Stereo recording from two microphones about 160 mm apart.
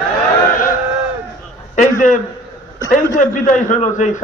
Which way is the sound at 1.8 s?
55° left (ahead or behind).